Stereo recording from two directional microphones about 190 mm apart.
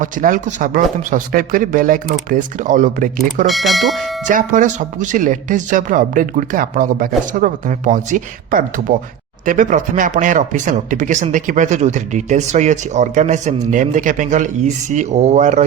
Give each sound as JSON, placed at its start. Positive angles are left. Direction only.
{"t": 0.0, "sound": "speech", "side_deg": -45}
{"t": 3.4, "sound": "speech", "side_deg": 0}
{"t": 4.3, "sound": "speech", "side_deg": -40}